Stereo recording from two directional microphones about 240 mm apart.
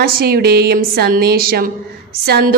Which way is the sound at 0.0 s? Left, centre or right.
Right.